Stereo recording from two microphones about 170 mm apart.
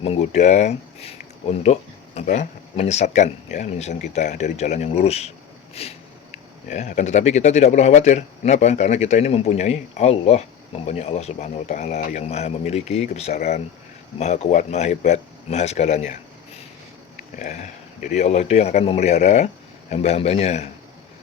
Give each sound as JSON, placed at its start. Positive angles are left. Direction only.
{"t": 0.0, "sound": "a man's voice", "side_deg": 40}
{"t": 17.3, "sound": "a man's voice", "side_deg": 45}